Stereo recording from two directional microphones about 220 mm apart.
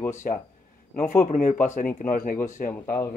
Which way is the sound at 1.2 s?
35° left (ahead or behind).